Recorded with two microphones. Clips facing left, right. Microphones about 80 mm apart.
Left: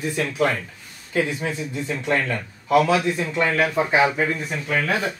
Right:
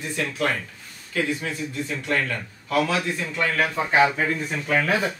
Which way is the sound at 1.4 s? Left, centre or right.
Left.